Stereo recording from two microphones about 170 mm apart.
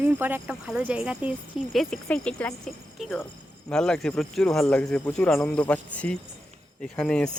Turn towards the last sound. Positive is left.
turn(degrees=5)  # may be behind; listen again after turning